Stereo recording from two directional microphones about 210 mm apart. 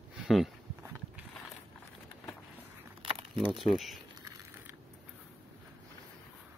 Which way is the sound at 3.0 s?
25° right (ahead or behind).